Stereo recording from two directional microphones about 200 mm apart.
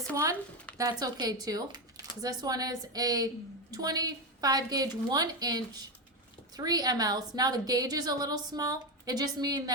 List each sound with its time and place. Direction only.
0.8 s a woman's voice: 20° right (ahead or behind)